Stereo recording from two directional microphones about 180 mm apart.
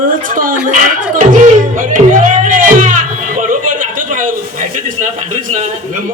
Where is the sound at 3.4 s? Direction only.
45° right (ahead or behind).